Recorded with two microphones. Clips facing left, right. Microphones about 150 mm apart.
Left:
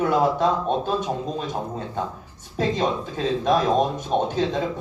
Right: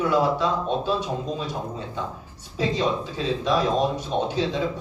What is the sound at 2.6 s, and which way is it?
Speech, 50° left (ahead or behind).